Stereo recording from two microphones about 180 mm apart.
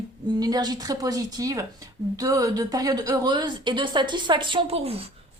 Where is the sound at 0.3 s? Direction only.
20° right (ahead or behind).